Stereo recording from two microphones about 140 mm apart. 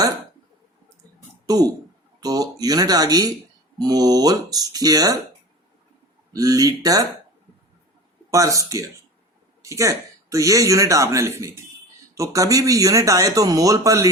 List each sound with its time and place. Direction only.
1.5 s speech: 25° right (ahead or behind)
6.3 s speech: 25° right (ahead or behind)
8.3 s speech: 25° right (ahead or behind)